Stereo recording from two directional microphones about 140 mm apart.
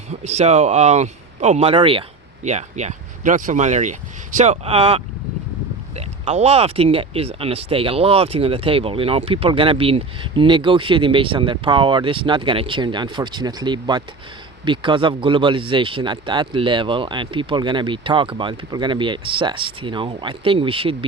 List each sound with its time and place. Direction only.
0.1 s speech: 50° right (ahead or behind)
2.4 s speech: 55° right (ahead or behind); by 20.9 s 40° right (ahead or behind)